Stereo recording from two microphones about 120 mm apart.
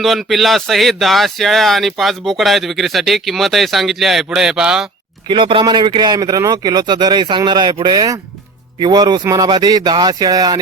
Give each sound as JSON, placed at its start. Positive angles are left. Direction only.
{"t": 0.0, "sound": "speech", "side_deg": 0}
{"t": 5.3, "sound": "speech", "side_deg": -45}